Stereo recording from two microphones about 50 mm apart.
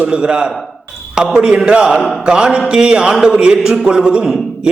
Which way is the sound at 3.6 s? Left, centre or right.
Centre.